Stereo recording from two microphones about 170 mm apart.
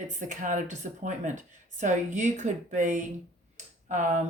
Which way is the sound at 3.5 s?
50° right (ahead or behind).